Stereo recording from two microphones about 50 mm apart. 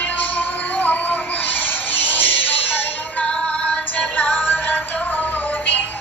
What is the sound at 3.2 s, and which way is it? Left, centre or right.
Synthetic singing, left.